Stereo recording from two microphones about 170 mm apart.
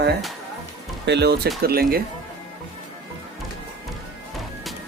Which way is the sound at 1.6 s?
65° right (ahead or behind).